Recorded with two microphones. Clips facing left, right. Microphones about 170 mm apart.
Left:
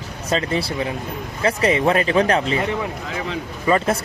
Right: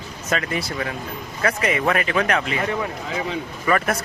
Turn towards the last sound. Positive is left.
turn(degrees=25)  # may be behind; listen again after turning